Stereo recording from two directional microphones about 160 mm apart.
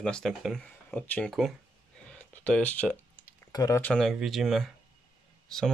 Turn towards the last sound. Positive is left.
turn(degrees=5)  # may be behind; listen again after turning